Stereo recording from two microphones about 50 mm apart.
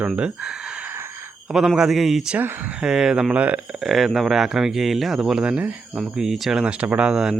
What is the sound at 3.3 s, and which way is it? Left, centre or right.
Speech, right.